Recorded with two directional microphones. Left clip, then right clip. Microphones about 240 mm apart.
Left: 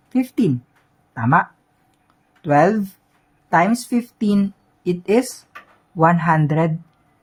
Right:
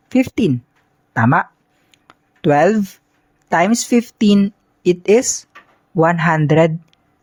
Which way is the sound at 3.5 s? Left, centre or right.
Right.